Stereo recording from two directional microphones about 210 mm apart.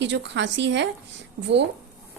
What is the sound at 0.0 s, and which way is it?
Speech, 60° right (ahead or behind).